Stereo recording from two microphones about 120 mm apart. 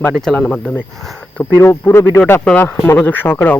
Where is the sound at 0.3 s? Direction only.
10° left (ahead or behind).